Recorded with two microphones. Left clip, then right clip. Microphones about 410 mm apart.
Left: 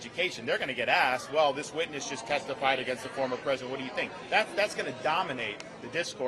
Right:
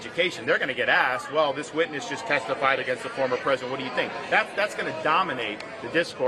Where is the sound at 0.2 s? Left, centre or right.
Left.